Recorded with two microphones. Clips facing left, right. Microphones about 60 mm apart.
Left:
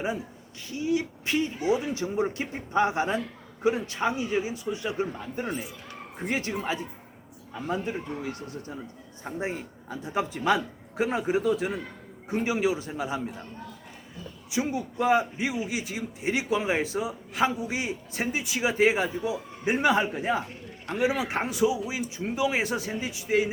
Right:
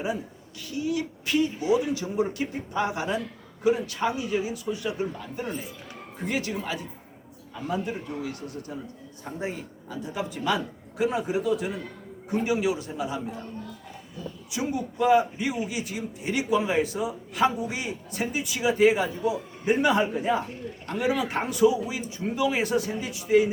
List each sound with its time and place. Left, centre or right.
0.7 s a man's voice: left
14.5 s a man's voice: left